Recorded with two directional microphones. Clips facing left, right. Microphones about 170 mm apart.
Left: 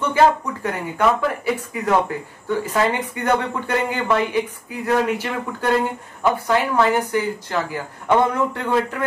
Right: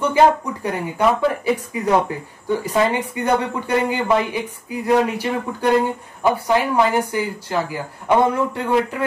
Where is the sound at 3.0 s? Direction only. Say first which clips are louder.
Right 2 dB; 10° right (ahead or behind).